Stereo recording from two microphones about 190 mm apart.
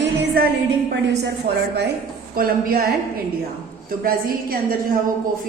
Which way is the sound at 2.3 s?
50° right (ahead or behind).